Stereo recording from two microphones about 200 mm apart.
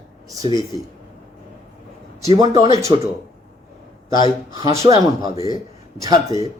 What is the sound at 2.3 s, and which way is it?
Speech, 20° right (ahead or behind).